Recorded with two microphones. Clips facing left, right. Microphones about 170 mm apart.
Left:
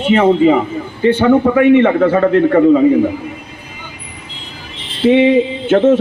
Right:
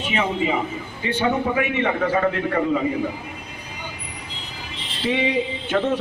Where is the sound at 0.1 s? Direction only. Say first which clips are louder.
Left 13 dB; 55° left (ahead or behind).